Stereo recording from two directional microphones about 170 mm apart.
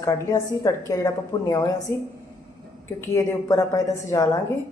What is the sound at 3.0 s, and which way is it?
A woman's voice, 20° left (ahead or behind).